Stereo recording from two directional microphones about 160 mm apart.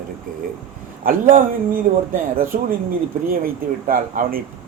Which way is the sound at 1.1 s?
60° right (ahead or behind).